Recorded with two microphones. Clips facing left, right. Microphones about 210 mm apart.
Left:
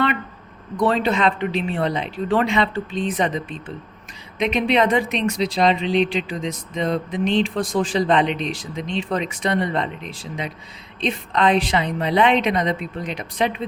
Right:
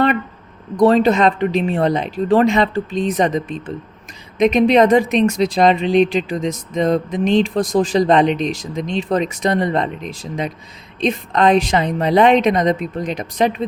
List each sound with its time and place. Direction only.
0.8 s speech: 40° right (ahead or behind)